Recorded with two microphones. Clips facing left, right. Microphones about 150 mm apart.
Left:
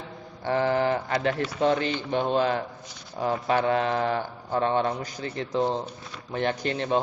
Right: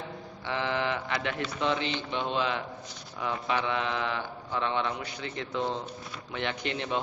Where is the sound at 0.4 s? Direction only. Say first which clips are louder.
Left 7 dB; 45° left (ahead or behind).